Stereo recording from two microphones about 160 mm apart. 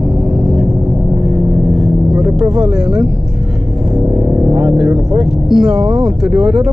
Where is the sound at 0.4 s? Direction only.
5° right (ahead or behind).